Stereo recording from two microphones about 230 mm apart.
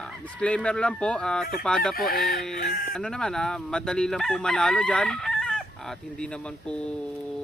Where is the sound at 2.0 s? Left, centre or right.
Left.